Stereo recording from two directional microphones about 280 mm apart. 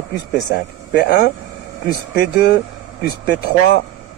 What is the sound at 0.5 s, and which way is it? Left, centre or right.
Speech, left.